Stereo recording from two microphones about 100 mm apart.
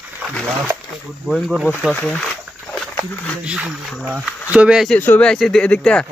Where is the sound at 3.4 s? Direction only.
10° right (ahead or behind).